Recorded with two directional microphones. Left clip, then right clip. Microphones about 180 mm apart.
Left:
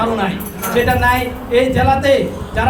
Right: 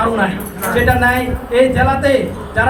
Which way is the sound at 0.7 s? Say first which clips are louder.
Right 1 dB; 15° left (ahead or behind).